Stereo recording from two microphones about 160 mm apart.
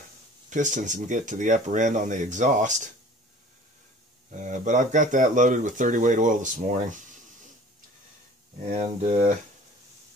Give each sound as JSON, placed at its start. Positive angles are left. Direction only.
{"t": 0.5, "sound": "speech", "side_deg": -50}
{"t": 4.3, "sound": "speech", "side_deg": -50}
{"t": 8.7, "sound": "speech", "side_deg": -50}
{"t": 9.1, "sound": "speech", "side_deg": -65}